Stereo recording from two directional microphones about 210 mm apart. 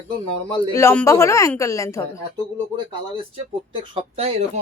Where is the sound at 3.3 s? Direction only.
25° right (ahead or behind).